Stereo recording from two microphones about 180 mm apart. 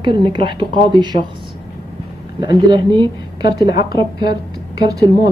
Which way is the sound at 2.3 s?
25° right (ahead or behind).